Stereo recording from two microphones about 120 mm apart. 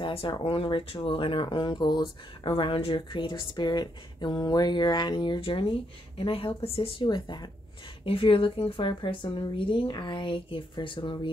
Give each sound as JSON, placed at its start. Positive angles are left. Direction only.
{"t": 0.0, "sound": "speech", "side_deg": 45}